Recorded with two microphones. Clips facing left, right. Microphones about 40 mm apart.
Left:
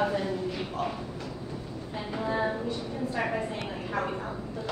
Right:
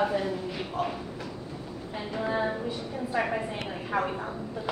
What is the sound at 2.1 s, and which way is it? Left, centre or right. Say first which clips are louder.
A woman's voice: even; centre.